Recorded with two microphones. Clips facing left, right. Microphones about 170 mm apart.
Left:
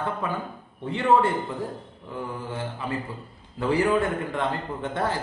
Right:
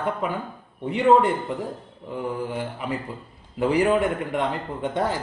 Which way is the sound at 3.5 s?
15° right (ahead or behind).